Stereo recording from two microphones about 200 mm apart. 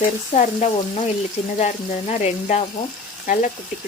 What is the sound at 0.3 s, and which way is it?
Speech, 35° left (ahead or behind).